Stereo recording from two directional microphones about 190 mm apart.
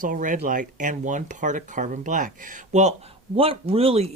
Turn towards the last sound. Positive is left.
turn(degrees=-30)  # may be behind; listen again after turning